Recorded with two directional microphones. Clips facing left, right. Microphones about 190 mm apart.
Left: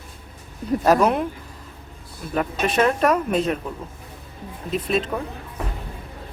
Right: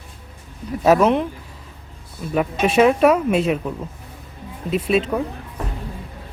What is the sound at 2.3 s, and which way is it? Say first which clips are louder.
Speech: right 4 dB; 5° right (ahead or behind).